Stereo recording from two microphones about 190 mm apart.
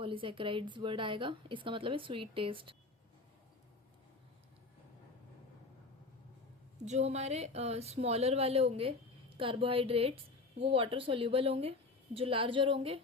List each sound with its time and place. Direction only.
0.0 s a woman's voice: 25° right (ahead or behind)
6.8 s a woman's voice: 35° right (ahead or behind)